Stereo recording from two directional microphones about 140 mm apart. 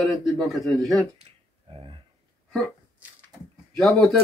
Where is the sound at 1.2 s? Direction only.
40° right (ahead or behind).